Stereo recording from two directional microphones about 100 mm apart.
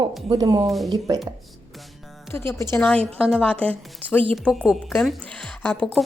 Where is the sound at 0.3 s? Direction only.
45° right (ahead or behind).